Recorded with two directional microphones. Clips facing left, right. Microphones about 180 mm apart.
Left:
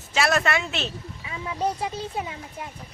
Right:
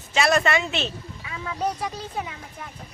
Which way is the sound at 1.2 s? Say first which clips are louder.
Left 1 dB; 20° left (ahead or behind).